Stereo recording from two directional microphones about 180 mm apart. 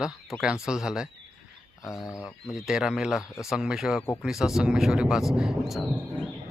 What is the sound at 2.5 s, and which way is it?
Speech, 5° right (ahead or behind).